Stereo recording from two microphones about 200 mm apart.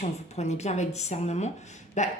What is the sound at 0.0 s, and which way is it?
Speech, 35° left (ahead or behind).